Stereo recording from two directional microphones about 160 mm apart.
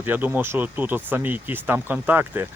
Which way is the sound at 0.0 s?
10° right (ahead or behind).